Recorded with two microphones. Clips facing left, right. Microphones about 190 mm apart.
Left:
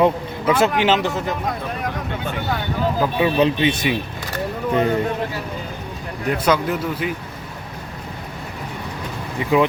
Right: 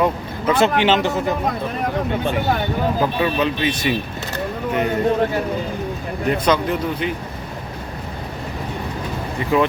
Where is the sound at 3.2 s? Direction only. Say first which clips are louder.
Left 4 dB; 15° left (ahead or behind).